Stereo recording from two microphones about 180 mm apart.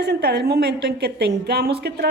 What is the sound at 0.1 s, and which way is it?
A woman's voice, 60° right (ahead or behind).